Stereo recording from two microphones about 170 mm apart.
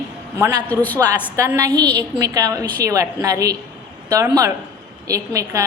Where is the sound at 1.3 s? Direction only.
15° right (ahead or behind).